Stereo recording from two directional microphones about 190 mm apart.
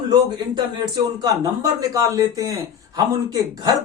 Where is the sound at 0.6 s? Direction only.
20° right (ahead or behind).